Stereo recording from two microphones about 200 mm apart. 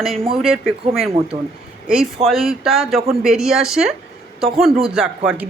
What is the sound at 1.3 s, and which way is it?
Speech, 30° right (ahead or behind).